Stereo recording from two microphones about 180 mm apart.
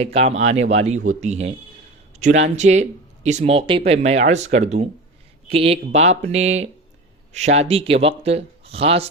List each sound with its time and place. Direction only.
0.0 s speech: 35° right (ahead or behind)
2.1 s a sound: 40° right (ahead or behind)
2.6 s speech: 40° right (ahead or behind)